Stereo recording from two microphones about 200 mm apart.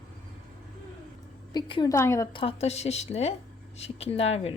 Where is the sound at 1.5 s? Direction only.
25° left (ahead or behind).